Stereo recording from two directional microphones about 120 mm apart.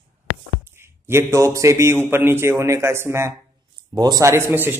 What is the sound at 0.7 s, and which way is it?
A man's voice, 20° right (ahead or behind).